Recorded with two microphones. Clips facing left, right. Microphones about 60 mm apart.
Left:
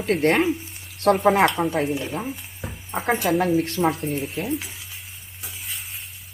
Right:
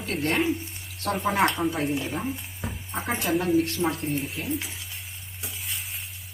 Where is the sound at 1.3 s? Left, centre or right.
Left.